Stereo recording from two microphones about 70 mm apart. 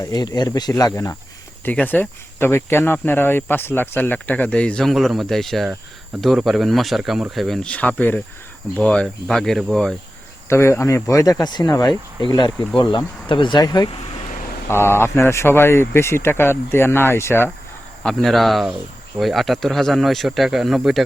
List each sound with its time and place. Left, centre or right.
0.0 s speech: left
1.6 s speech: left
2.4 s speech: left; by 4.9 s centre
4.9 s speech: centre
7.7 s speech: left
9.2 s speech: centre
10.5 s speech: left
11.3 s speech: left
11.7 s speech: left
14.7 s speech: left
18.0 s speech: centre